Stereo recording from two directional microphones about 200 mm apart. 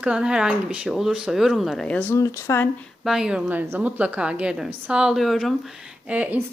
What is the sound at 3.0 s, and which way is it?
A woman's voice, 5° right (ahead or behind).